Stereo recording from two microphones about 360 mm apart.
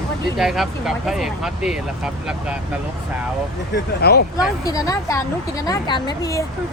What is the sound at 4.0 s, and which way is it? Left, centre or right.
Speech, left.